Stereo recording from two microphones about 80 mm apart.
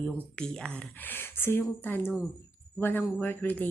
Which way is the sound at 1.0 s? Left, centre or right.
Left.